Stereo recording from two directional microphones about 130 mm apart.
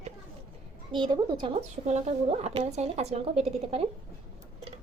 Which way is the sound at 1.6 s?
55° right (ahead or behind).